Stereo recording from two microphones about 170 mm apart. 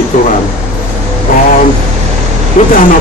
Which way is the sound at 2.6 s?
45° left (ahead or behind).